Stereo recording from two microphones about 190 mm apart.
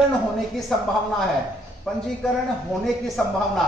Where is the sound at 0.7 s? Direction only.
Centre (ahead or behind).